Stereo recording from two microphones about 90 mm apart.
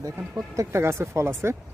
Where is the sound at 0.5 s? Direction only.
30° right (ahead or behind).